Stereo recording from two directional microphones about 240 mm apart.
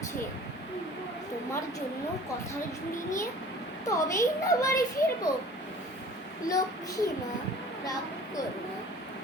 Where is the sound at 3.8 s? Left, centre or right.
Centre.